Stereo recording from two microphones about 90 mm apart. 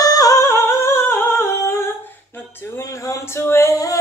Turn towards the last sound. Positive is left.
turn(degrees=35)  # may be behind; listen again after turning